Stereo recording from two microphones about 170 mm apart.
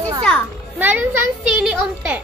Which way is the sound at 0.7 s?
10° right (ahead or behind).